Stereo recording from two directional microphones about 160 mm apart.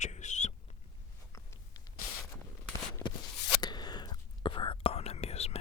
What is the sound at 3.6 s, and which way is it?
Whispering, 25° left (ahead or behind).